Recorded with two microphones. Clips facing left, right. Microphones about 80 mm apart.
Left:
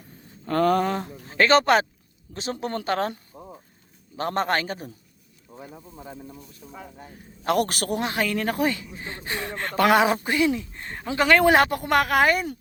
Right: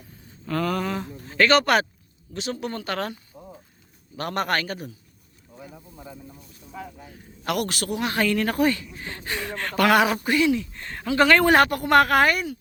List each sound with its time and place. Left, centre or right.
0.4 s a sound: left
1.3 s a man's voice: left
4.2 s speech: left
7.4 s a man's voice: left
8.0 s speech: centre
11.2 s speech: centre